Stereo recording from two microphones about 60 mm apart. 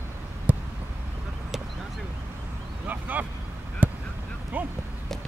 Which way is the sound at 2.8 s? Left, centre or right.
Right.